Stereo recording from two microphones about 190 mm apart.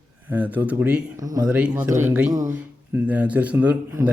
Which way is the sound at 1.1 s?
20° right (ahead or behind).